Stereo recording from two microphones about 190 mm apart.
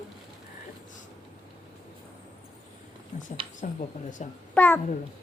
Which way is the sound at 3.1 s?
40° left (ahead or behind).